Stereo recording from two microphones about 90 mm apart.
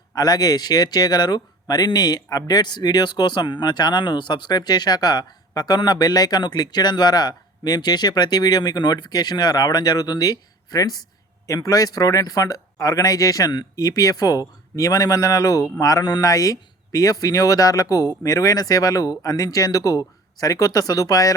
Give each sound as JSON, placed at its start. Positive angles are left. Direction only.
{"t": 0.1, "sound": "speech", "side_deg": 45}